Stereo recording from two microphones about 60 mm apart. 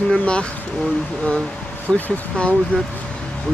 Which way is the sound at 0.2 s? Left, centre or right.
Centre.